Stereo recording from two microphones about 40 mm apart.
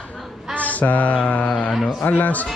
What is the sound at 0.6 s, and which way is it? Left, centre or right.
Mantra, left.